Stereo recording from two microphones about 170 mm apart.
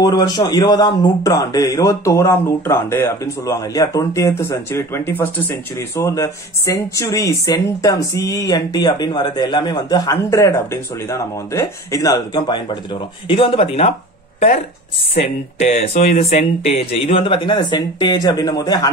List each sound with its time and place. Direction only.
0.0 s a man's voice: 20° left (ahead or behind)
15.1 s speech: 40° left (ahead or behind); by 18.9 s 25° left (ahead or behind)